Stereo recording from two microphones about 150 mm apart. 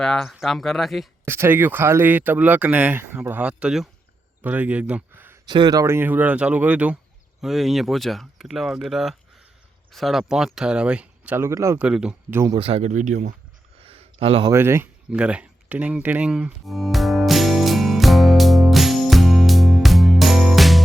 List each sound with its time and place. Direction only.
0.0 s speech: centre (ahead or behind)
1.2 s speech: 15° right (ahead or behind)
5.5 s speech: 30° right (ahead or behind)
11.8 s speech: 5° right (ahead or behind)
12.5 s speech: 40° right (ahead or behind); by 13.3 s 55° right (ahead or behind)
13.7 s a sound: 40° right (ahead or behind)
14.4 s a sound: 20° right (ahead or behind); by 20.8 s centre (ahead or behind)